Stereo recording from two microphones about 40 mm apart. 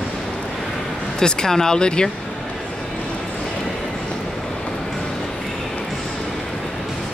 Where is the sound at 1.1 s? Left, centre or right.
Centre.